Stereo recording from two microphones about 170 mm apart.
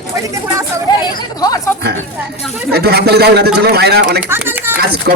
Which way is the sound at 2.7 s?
70° right (ahead or behind).